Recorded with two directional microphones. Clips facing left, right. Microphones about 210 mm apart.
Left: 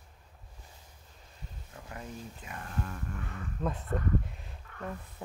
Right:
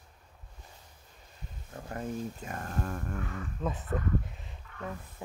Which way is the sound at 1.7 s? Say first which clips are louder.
Right 8 dB; 45° right (ahead or behind).